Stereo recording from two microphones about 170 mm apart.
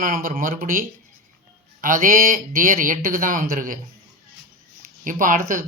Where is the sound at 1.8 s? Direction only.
55° right (ahead or behind).